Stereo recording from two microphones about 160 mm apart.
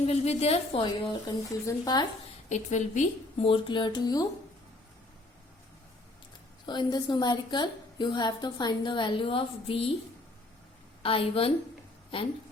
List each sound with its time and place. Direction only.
0.0 s a woman's voice: 40° left (ahead or behind); by 2.0 s 25° left (ahead or behind)
2.5 s a woman's voice: 45° left (ahead or behind)
3.4 s a woman's voice: 30° left (ahead or behind)
6.7 s a woman's voice: 30° left (ahead or behind)
11.0 s a woman's voice: 35° left (ahead or behind)